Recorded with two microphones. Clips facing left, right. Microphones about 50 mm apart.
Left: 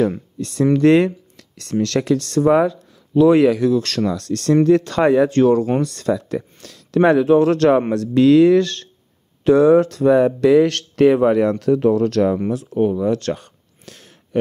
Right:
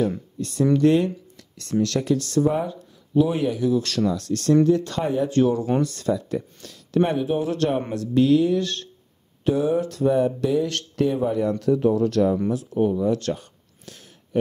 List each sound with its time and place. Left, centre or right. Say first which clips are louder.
0.4 s speech: left 3 dB; left
4.1 s speech: left 2 dB; left
5.8 s speech: left 3 dB; left
12.7 s a sound: left 4 dB; left